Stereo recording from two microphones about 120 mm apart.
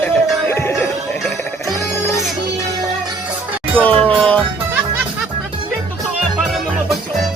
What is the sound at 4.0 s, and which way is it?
Music, 10° left (ahead or behind).